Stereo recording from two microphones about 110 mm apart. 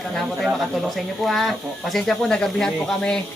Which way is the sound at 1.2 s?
Centre (ahead or behind).